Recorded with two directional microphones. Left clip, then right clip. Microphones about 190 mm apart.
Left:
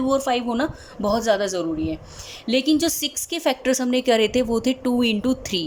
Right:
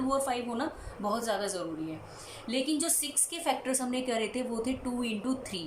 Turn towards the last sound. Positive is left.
turn(degrees=50)  # may be behind; listen again after turning